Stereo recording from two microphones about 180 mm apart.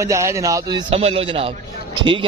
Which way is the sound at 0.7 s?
35° right (ahead or behind).